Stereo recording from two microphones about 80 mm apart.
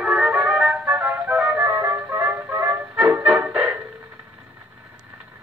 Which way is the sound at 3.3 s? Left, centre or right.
Centre.